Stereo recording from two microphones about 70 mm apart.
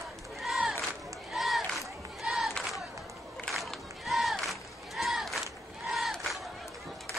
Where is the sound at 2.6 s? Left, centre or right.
Centre.